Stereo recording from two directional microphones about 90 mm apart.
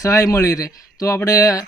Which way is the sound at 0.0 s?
35° left (ahead or behind).